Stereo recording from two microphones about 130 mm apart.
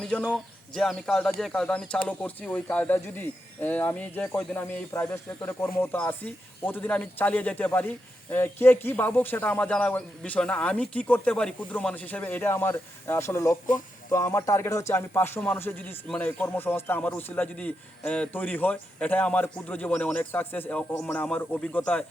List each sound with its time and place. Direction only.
0.0 s speech: 5° left (ahead or behind)